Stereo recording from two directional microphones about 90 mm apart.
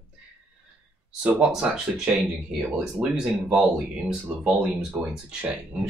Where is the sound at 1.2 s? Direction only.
10° right (ahead or behind).